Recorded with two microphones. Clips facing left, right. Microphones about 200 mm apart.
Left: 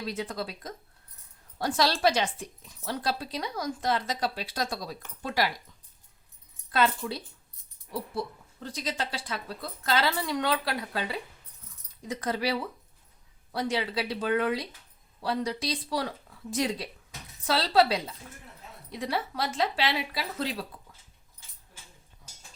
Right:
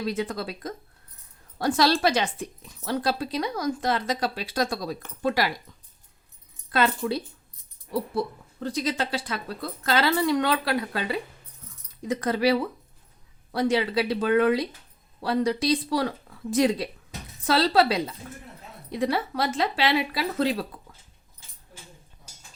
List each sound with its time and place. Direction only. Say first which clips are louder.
0.0 s a woman's voice: right 5 dB; 60° right (ahead or behind); by 2.3 s 90° right
2.8 s speech: right 5 dB; 70° right (ahead or behind)
6.7 s speech: right 3 dB; 70° right (ahead or behind)
8.6 s speech: right 7 dB; 75° right (ahead or behind)